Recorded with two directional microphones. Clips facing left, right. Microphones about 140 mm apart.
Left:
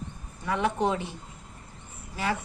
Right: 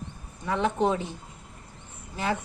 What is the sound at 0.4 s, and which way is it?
Speech, 25° right (ahead or behind).